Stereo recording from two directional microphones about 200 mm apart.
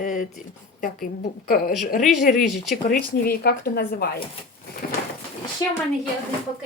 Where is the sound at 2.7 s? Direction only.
40° left (ahead or behind).